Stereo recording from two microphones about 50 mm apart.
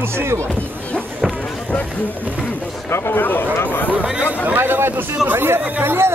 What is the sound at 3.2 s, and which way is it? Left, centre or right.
Speech, left.